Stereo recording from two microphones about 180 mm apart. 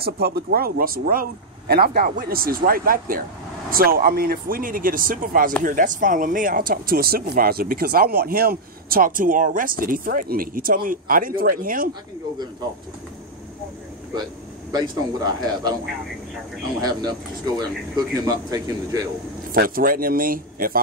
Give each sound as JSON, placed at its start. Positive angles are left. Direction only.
{"t": 0.0, "sound": "speech", "side_deg": -60}
{"t": 14.7, "sound": "speech", "side_deg": -20}
{"t": 17.6, "sound": "speech", "side_deg": -20}
{"t": 19.5, "sound": "speech", "side_deg": -55}